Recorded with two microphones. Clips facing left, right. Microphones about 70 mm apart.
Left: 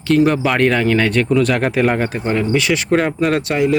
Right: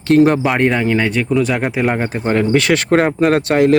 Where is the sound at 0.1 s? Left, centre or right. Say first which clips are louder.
Right 3 dB; right.